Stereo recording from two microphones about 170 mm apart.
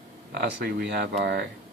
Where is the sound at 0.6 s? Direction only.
75° right (ahead or behind); by 1.4 s 90° right.